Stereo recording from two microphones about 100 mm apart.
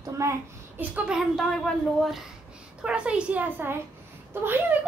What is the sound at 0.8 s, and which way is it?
Speech, 10° right (ahead or behind).